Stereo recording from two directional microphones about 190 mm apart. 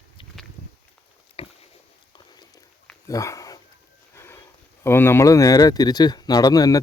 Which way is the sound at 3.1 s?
15° left (ahead or behind).